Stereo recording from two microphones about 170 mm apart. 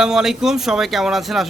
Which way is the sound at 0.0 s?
5° right (ahead or behind).